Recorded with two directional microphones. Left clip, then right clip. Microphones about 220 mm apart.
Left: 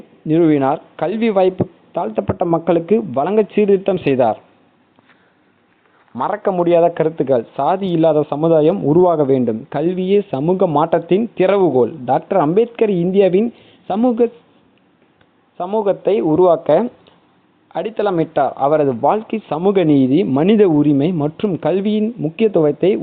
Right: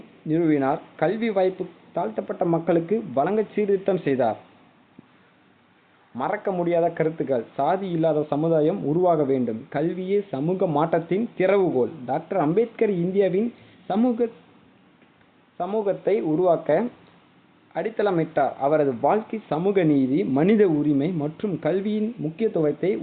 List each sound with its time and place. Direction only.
0.3 s speech: 35° left (ahead or behind)
6.1 s speech: 35° left (ahead or behind)
15.5 s speech: 30° left (ahead or behind)